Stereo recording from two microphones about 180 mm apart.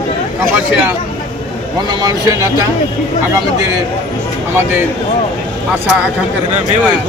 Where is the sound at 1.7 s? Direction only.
20° right (ahead or behind).